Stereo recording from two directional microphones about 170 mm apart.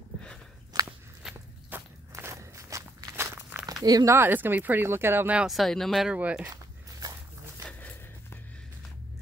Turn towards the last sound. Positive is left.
turn(degrees=5)  # may be behind; listen again after turning